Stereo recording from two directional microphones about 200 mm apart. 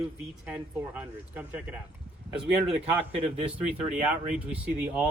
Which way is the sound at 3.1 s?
30° right (ahead or behind).